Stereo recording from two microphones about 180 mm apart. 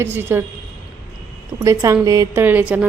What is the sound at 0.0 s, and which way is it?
Speech, 10° right (ahead or behind).